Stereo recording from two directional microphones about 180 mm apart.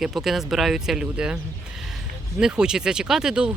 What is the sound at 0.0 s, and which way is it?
Speech, centre (ahead or behind).